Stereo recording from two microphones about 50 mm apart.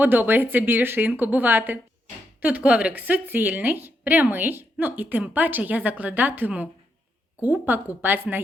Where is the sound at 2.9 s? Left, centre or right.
Right.